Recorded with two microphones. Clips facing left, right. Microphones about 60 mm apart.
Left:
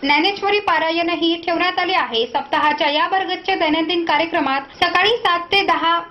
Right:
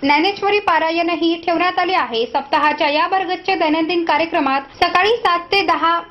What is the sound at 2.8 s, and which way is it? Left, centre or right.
Speech, right.